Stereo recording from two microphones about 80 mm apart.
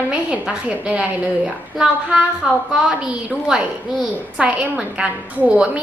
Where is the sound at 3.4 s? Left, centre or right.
Centre.